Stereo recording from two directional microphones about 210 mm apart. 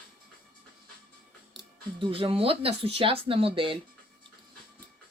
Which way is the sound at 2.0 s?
25° right (ahead or behind).